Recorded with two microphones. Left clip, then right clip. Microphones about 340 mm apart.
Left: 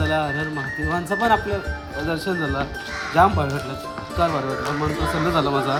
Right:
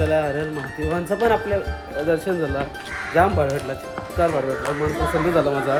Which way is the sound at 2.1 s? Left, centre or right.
Centre.